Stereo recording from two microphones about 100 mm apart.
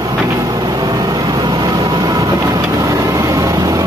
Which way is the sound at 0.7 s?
40° right (ahead or behind).